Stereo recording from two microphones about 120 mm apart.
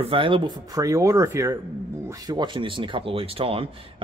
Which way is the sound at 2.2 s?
35° right (ahead or behind).